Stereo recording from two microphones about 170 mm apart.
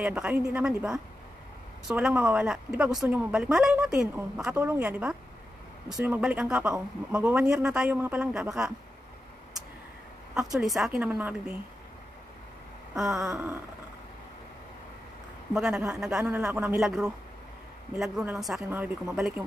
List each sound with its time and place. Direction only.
0.0 s a woman's voice: 5° right (ahead or behind)
10.3 s speech: centre (ahead or behind)
12.9 s speech: 5° right (ahead or behind)
15.5 s a woman's voice: 5° right (ahead or behind)